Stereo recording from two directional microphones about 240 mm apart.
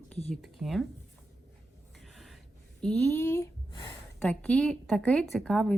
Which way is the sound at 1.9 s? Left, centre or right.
Centre.